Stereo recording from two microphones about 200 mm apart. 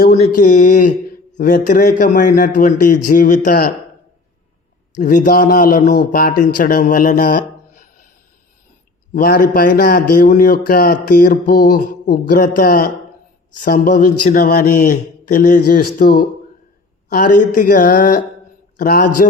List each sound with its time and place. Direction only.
0.1 s a man's voice: 40° left (ahead or behind)
4.9 s a man's voice: 40° left (ahead or behind)
9.1 s a man's voice: 45° left (ahead or behind)